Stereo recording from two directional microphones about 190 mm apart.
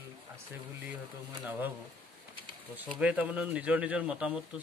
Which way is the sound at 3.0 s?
10° right (ahead or behind).